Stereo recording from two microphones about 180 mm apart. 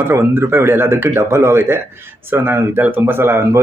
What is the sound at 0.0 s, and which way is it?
Speech, 15° right (ahead or behind).